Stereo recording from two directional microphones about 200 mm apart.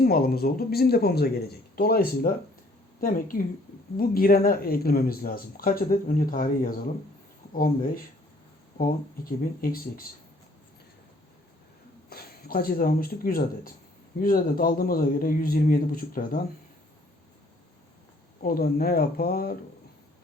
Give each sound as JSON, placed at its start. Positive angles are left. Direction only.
{"t": 0.0, "sound": "speech", "side_deg": 50}
{"t": 9.4, "sound": "speech", "side_deg": 45}
{"t": 12.0, "sound": "speech", "side_deg": 50}
{"t": 18.4, "sound": "speech", "side_deg": 50}